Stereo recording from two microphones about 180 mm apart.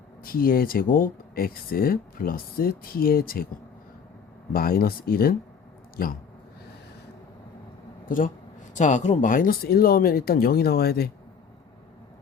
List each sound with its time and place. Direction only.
0.2 s speech: 55° left (ahead or behind)
4.5 s speech: 55° left (ahead or behind)
8.0 s speech: 50° left (ahead or behind)